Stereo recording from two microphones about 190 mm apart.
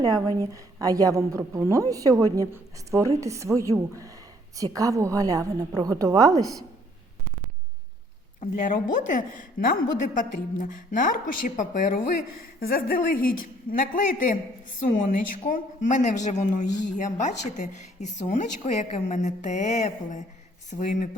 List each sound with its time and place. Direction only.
0.0 s a woman's voice: 20° right (ahead or behind)
8.4 s a woman's voice: 45° left (ahead or behind)